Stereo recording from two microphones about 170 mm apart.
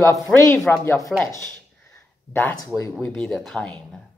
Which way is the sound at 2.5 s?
20° left (ahead or behind).